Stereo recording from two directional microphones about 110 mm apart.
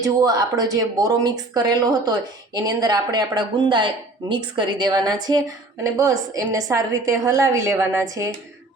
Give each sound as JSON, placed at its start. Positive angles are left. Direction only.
{"t": 0.0, "sound": "speech", "side_deg": -35}